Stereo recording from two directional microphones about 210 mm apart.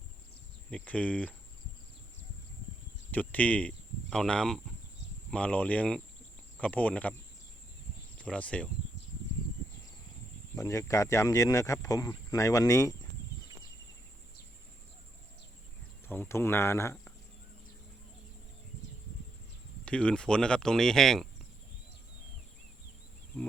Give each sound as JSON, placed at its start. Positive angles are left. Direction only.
{"t": 0.7, "sound": "speech", "side_deg": 5}
{"t": 3.1, "sound": "speech", "side_deg": 5}
{"t": 8.2, "sound": "speech", "side_deg": 5}
{"t": 10.5, "sound": "speech", "side_deg": 15}
{"t": 16.0, "sound": "speech", "side_deg": 10}
{"t": 19.8, "sound": "speech", "side_deg": 5}